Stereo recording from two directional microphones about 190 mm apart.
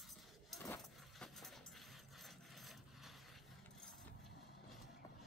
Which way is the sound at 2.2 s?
Centre (ahead or behind).